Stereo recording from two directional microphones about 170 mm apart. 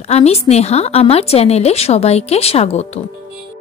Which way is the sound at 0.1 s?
40° left (ahead or behind).